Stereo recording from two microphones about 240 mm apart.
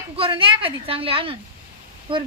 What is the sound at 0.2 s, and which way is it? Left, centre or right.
A woman's voice, right.